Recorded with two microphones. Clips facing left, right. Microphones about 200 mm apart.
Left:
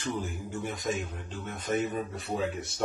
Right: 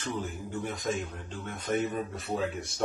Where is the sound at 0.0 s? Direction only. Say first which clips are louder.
Left 1 dB; 10° left (ahead or behind).